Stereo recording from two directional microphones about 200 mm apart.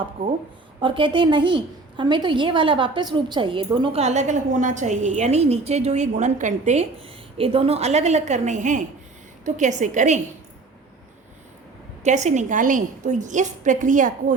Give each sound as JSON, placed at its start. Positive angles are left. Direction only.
{"t": 0.2, "sound": "a woman's voice", "side_deg": -25}
{"t": 12.0, "sound": "a woman's voice", "side_deg": -35}